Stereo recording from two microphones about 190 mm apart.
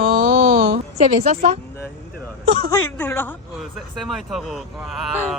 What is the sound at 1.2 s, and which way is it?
Speech, 35° right (ahead or behind).